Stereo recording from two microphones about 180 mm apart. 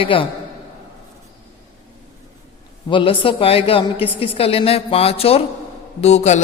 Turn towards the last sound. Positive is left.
turn(degrees=35)  # may be behind; listen again after turning